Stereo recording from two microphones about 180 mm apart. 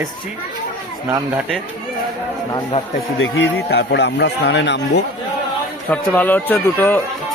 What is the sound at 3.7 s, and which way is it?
Speech, 70° left (ahead or behind).